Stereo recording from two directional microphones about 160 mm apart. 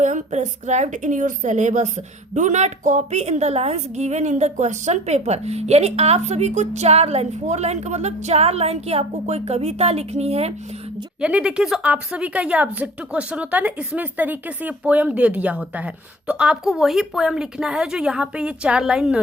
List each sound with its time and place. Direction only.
0.0 s a woman's voice: 50° right (ahead or behind)
11.2 s a woman's voice: 5° right (ahead or behind)